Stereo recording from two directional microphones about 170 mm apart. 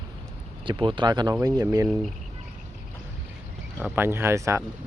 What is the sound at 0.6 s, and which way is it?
Speech, 30° right (ahead or behind).